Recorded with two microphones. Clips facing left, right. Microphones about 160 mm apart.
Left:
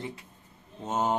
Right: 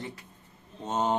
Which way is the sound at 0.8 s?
5° left (ahead or behind).